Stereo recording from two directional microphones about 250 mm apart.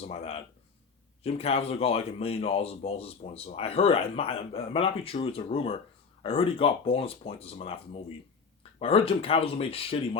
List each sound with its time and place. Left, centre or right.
0.0 s speech: left
8.8 s speech: left